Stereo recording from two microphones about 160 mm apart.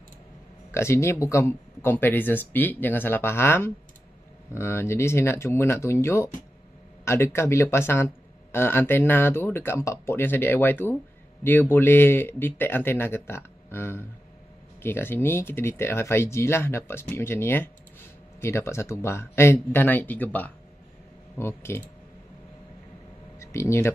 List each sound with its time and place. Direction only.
0.7 s speech: 15° left (ahead or behind)
23.4 s speech: 15° left (ahead or behind)